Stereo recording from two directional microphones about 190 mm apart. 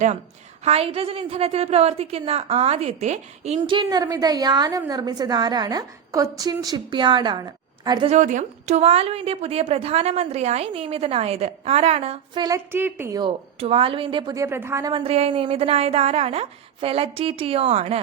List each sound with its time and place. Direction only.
0.6 s a woman's voice: 30° right (ahead or behind)
8.1 s a woman's voice: 40° right (ahead or behind)